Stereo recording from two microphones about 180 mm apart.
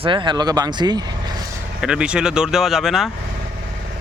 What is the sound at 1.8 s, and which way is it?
Speech, 5° right (ahead or behind).